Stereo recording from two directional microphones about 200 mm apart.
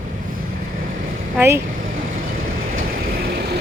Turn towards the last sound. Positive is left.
turn(degrees=-45)  # may be behind; listen again after turning